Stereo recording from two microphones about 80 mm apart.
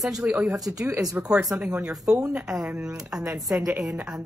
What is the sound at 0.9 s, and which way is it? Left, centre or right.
Speech, right.